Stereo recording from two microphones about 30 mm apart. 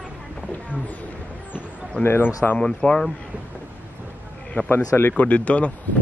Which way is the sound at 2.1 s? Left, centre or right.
Left.